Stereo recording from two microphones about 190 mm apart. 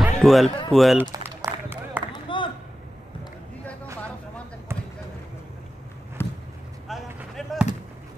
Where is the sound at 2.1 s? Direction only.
25° left (ahead or behind).